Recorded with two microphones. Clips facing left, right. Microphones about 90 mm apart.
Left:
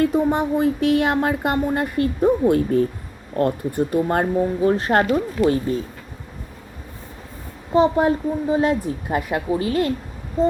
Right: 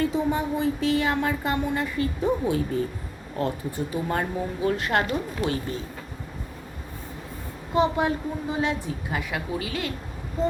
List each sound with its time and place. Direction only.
0.0 s speech: 55° left (ahead or behind)
4.6 s a woman's voice: 35° left (ahead or behind)
7.7 s a woman's voice: 40° left (ahead or behind)